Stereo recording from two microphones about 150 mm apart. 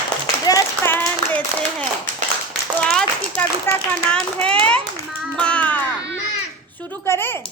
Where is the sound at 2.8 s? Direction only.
5° left (ahead or behind).